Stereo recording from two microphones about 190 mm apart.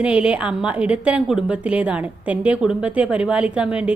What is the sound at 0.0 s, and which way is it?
A woman's voice, 5° right (ahead or behind).